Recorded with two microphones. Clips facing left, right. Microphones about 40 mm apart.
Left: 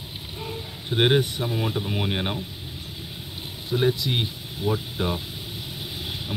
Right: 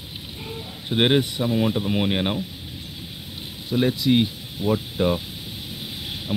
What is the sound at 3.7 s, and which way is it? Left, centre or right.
Speech, centre.